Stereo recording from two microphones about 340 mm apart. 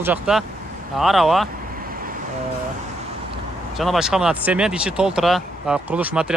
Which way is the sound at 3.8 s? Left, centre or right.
Centre.